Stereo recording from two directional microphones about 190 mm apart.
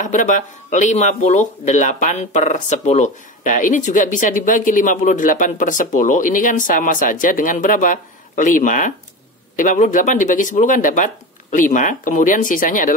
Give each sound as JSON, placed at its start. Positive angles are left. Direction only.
{"t": 0.0, "sound": "speech", "side_deg": 40}